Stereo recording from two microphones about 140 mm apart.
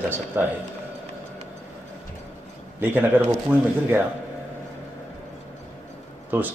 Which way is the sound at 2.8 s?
15° right (ahead or behind).